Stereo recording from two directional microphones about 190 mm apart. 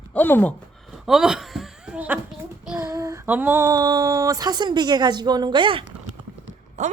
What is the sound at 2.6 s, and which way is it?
Child singing, 15° right (ahead or behind).